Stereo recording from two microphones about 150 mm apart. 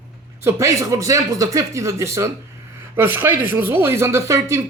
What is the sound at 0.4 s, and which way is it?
Speech, 20° right (ahead or behind).